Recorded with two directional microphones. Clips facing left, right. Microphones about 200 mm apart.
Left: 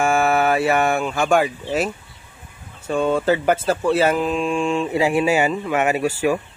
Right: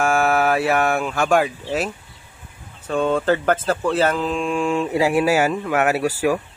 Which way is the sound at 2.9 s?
5° left (ahead or behind).